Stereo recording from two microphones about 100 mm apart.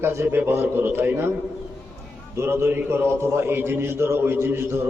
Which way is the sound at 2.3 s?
25° right (ahead or behind).